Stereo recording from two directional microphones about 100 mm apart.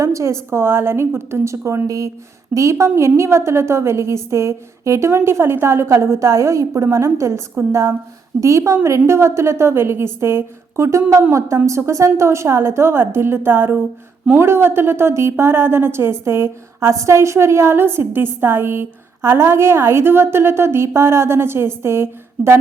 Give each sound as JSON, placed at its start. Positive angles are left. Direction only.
{"t": 0.0, "sound": "a woman's voice", "side_deg": -30}